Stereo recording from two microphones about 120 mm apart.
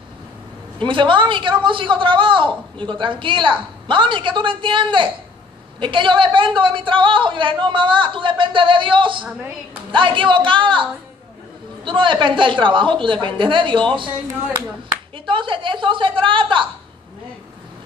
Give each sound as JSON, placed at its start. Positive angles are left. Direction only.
{"t": 0.7, "sound": "a woman's voice", "side_deg": -45}
{"t": 15.2, "sound": "a woman's voice", "side_deg": -45}